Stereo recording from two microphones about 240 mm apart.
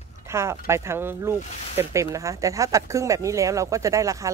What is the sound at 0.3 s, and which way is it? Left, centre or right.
Speech, centre.